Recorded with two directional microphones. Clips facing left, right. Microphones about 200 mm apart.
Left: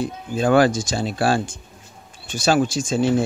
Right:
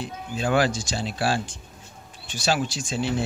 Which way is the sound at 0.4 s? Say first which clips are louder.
Left 7 dB; 50° left (ahead or behind).